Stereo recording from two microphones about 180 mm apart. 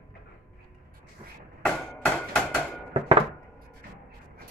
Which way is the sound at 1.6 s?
5° left (ahead or behind).